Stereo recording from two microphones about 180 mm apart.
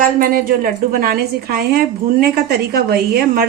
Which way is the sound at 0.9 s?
55° right (ahead or behind).